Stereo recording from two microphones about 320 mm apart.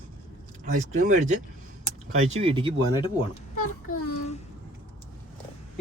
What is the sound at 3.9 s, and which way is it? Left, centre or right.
Speech, left.